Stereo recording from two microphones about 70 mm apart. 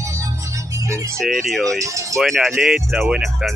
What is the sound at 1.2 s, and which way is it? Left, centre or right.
Speech, centre.